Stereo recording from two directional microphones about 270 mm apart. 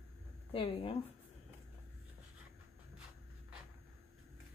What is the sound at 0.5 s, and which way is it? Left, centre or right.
Speech, centre.